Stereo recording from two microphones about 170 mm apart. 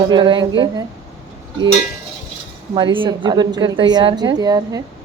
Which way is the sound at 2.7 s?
30° right (ahead or behind).